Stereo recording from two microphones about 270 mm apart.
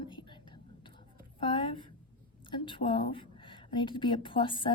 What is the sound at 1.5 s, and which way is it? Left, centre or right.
A woman's voice, centre.